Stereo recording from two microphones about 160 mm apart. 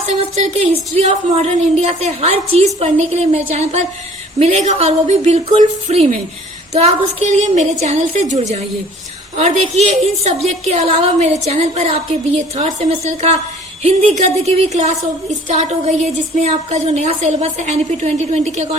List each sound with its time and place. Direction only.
0.1 s a woman's voice: 45° right (ahead or behind)